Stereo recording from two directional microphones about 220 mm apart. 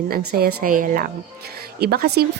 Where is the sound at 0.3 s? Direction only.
45° right (ahead or behind).